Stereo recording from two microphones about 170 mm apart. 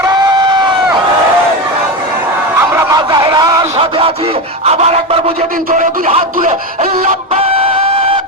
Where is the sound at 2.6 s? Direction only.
15° right (ahead or behind).